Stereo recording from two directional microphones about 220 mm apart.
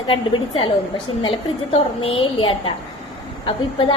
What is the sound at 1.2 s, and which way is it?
A woman's voice, 25° left (ahead or behind).